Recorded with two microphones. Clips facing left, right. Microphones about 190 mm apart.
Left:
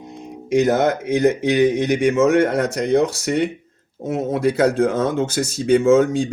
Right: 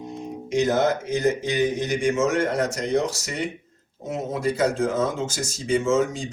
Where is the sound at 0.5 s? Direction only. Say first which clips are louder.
Left 4 dB; 65° left (ahead or behind).